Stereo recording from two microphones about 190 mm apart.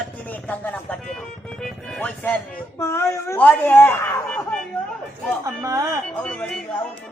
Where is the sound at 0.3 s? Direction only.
10° left (ahead or behind).